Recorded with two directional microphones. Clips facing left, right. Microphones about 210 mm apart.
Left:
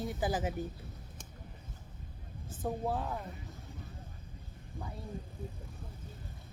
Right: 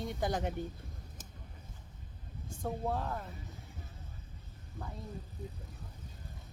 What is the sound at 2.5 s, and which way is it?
Speech, 5° left (ahead or behind).